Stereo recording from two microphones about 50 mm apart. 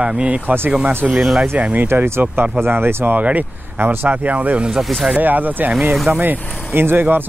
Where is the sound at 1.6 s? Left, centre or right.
Right.